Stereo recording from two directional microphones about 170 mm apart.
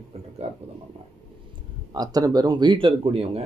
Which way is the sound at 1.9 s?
20° right (ahead or behind).